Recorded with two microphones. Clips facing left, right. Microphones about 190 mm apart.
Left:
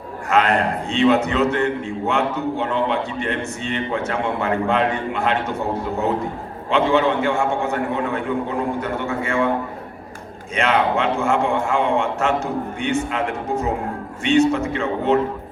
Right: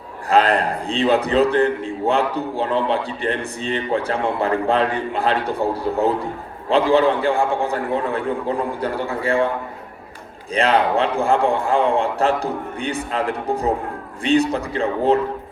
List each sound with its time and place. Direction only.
0.3 s a man's voice: 35° right (ahead or behind)
10.5 s a man's voice: 35° right (ahead or behind)